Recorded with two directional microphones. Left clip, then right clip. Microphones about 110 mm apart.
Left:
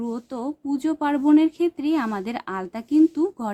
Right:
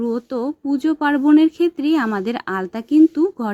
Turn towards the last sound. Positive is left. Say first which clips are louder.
# right 5 dB
turn(degrees=-20)  # may be behind; listen again after turning